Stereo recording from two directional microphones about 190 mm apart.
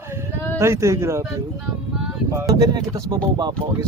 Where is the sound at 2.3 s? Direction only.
20° right (ahead or behind).